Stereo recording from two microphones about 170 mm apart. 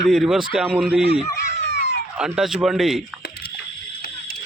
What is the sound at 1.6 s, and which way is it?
Cat, 90° left.